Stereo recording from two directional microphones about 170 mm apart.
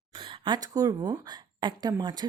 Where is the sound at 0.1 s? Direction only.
30° right (ahead or behind).